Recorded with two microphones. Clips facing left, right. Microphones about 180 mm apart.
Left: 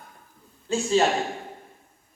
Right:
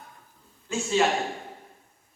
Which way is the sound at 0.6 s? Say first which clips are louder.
Left 3 dB; 35° left (ahead or behind).